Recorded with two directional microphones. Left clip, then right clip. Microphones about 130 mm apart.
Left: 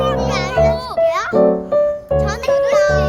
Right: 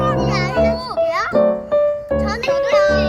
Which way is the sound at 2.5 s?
25° left (ahead or behind).